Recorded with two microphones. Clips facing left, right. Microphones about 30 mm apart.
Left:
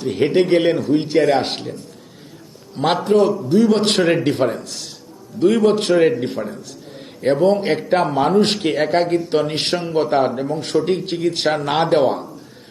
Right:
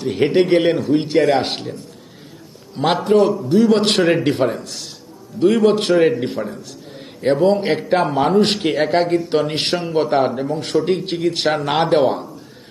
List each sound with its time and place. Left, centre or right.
0.0 s a man's voice: centre
2.7 s a man's voice: centre